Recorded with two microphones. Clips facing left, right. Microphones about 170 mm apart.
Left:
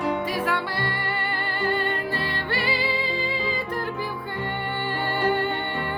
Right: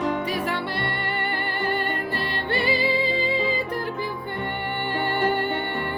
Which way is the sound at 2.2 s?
20° right (ahead or behind).